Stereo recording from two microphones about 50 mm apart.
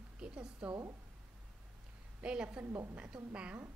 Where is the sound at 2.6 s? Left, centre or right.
Right.